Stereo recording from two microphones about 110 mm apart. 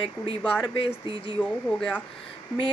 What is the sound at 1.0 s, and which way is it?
Speech, 55° left (ahead or behind).